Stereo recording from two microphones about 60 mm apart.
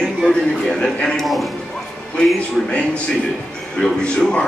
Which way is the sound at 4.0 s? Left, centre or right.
Centre.